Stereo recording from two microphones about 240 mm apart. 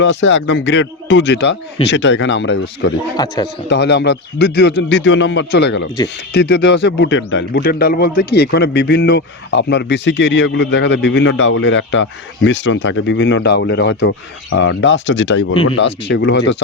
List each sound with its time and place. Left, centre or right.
0.0 s a man's voice: left
3.2 s speech: centre
3.7 s a man's voice: left